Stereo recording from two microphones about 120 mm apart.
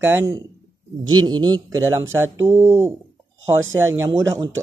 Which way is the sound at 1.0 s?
35° right (ahead or behind).